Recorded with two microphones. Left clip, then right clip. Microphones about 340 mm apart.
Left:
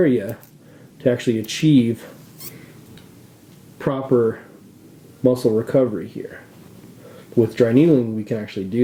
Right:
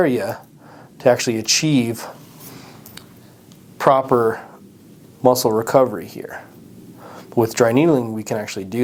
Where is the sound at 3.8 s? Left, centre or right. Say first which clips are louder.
Right 10 dB; right.